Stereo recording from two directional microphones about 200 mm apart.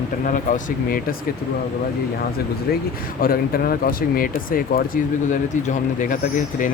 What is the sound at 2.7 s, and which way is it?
Speech, 50° left (ahead or behind).